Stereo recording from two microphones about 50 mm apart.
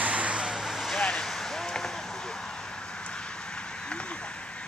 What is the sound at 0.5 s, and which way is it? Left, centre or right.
Vehicle, centre.